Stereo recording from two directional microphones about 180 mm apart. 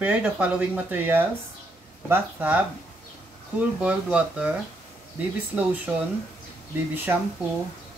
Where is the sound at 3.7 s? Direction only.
5° right (ahead or behind).